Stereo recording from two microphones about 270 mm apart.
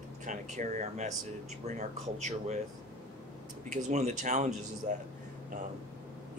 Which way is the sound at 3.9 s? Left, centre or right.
Right.